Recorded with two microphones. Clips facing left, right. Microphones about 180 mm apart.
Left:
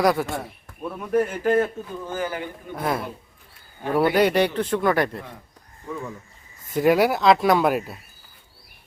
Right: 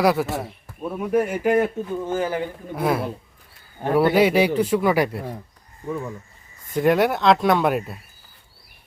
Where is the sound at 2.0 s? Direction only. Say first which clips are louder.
Right 4 dB; 25° right (ahead or behind).